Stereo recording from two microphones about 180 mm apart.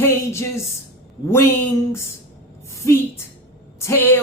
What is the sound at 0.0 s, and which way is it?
Speech, 15° left (ahead or behind).